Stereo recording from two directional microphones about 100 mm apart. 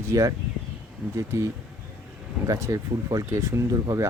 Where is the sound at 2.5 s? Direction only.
35° right (ahead or behind).